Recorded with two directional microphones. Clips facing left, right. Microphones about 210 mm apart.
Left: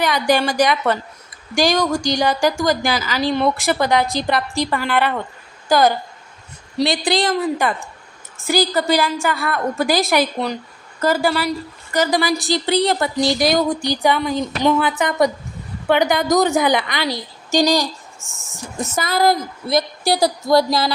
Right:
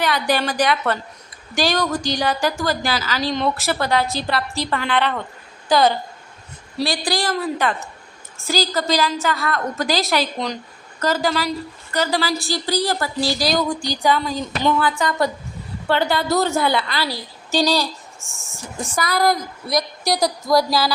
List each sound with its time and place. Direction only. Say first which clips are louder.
0.0 s a woman's voice: left 3 dB; 15° left (ahead or behind)
6.7 s a woman's voice: left 4 dB; 20° left (ahead or behind)
7.3 s a woman's voice: left 2 dB; 10° left (ahead or behind)
18.2 s speech: even; centre (ahead or behind)
18.9 s a woman's voice: left 2 dB; 25° left (ahead or behind)